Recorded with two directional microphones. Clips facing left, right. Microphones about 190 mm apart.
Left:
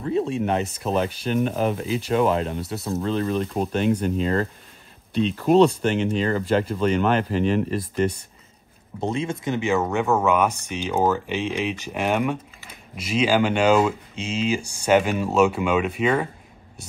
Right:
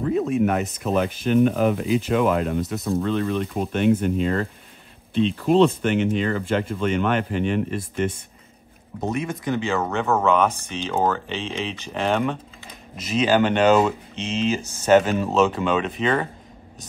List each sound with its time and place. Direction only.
0.1 s speech: 30° left (ahead or behind)
1.4 s speech: 55° right (ahead or behind)
2.0 s speech: 35° left (ahead or behind)
5.8 s speech: 35° left (ahead or behind)
9.0 s speech: 25° left (ahead or behind); by 16.3 s 10° left (ahead or behind)